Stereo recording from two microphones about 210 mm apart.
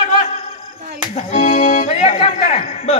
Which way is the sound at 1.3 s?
30° left (ahead or behind).